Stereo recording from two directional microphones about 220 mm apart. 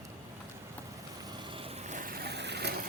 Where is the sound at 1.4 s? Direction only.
25° right (ahead or behind); by 2.8 s 50° right (ahead or behind).